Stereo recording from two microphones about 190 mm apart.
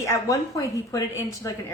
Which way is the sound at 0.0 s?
15° left (ahead or behind).